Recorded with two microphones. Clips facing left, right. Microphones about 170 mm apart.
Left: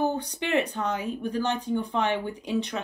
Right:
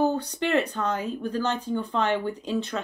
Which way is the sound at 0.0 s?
15° left (ahead or behind).